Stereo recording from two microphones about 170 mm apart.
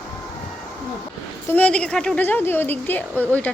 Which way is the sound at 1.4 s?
10° left (ahead or behind).